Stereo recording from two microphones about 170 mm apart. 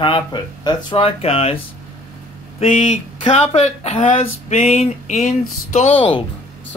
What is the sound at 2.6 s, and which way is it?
Speech, 45° left (ahead or behind).